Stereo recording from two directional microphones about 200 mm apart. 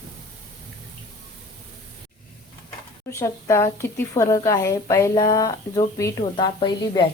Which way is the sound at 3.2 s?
15° left (ahead or behind).